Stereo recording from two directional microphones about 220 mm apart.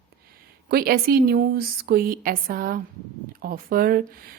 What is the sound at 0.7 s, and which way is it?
A woman's voice, 45° right (ahead or behind).